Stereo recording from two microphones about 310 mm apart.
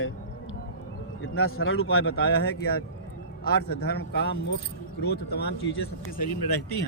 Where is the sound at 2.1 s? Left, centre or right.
Left.